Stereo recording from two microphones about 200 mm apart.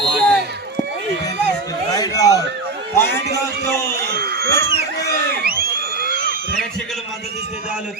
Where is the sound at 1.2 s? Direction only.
20° left (ahead or behind).